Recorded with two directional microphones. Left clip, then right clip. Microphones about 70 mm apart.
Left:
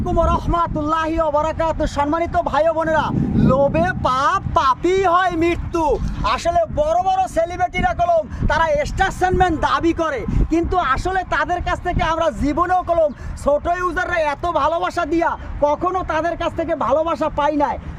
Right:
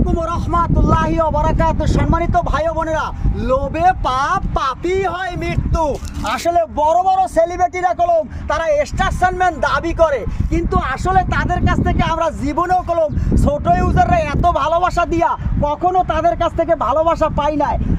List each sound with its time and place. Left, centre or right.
0.1 s speech: left
0.5 s speech: left
4.5 s speech: left
4.9 s speech: left
9.4 s speech: left
10.5 s speech: left; by 13.6 s centre
13.7 s speech: centre
15.6 s speech: left